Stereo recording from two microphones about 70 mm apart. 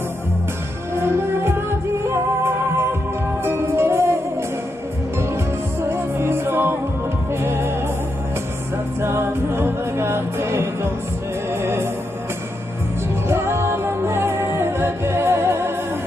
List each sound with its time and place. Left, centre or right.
0.9 s music: right
5.8 s music: right
9.0 s music: right
13.3 s music: right